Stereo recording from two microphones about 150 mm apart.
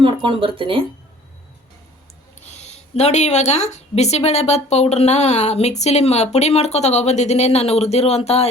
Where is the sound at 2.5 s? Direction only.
45° left (ahead or behind).